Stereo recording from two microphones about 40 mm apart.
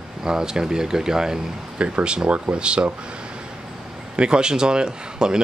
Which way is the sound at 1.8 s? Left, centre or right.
Right.